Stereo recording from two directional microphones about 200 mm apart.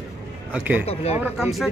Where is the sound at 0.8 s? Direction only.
30° left (ahead or behind).